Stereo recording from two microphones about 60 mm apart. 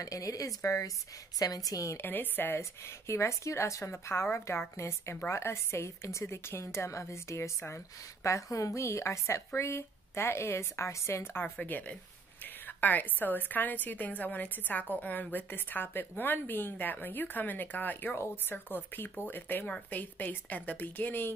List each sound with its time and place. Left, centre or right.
0.0 s speech: left
1.4 s a woman's voice: left
2.0 s a woman's voice: left
3.1 s a woman's voice: left
11.5 s a woman's voice: left
18.1 s a woman's voice: left